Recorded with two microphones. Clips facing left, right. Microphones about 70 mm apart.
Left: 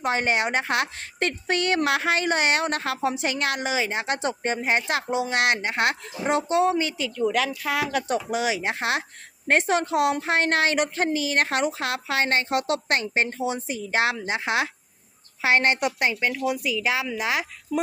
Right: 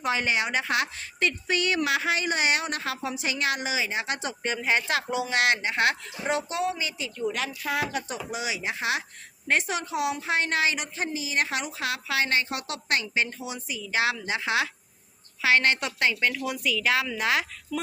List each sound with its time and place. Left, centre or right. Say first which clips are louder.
0.0 s a woman's voice: left 3 dB; left
7.6 s a woman's voice: left 3 dB; left; by 17.4 s centre